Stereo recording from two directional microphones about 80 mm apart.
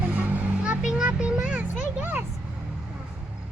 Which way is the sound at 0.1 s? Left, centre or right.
Centre.